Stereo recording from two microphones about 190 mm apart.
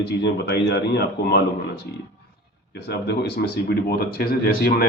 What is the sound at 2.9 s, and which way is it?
Speech, 60° left (ahead or behind).